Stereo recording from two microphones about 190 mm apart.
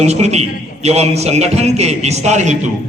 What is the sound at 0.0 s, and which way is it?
A man's voice, 35° right (ahead or behind).